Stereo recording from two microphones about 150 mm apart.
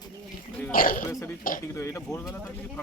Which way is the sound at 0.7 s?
70° left (ahead or behind).